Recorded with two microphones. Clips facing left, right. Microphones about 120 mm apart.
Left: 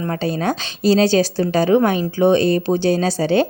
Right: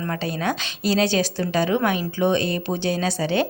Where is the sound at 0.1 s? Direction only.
35° left (ahead or behind).